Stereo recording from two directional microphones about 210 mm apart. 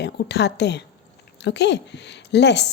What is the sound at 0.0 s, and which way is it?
A woman's voice, 50° left (ahead or behind).